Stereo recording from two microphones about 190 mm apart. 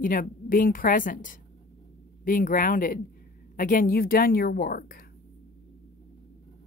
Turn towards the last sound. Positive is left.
turn(degrees=50)  # may be behind; listen again after turning